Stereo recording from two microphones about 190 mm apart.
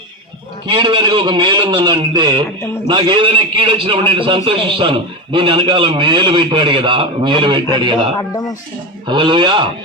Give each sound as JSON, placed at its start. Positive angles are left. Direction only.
{"t": 0.7, "sound": "a man's voice", "side_deg": -25}